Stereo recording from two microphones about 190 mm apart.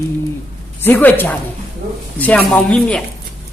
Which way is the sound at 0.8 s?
10° left (ahead or behind).